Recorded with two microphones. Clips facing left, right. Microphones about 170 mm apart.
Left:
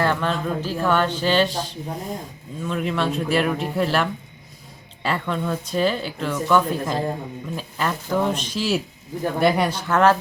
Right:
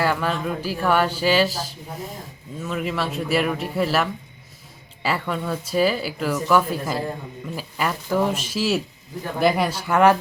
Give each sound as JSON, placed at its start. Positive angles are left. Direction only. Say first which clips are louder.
{"t": 0.0, "sound": "speech", "louder": "left 1 dB", "side_deg": -10}